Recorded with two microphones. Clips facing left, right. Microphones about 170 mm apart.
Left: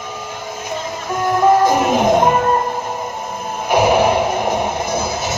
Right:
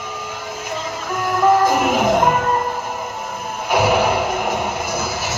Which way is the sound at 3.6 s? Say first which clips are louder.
Left 3 dB; 20° left (ahead or behind).